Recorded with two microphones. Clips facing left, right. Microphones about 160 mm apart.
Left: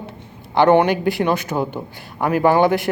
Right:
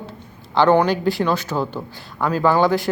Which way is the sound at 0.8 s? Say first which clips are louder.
Left 1 dB; 55° left (ahead or behind).